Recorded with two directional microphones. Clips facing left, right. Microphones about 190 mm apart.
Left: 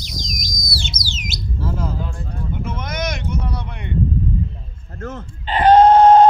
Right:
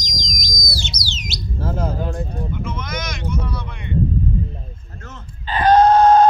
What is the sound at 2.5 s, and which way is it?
Vehicle, 55° left (ahead or behind).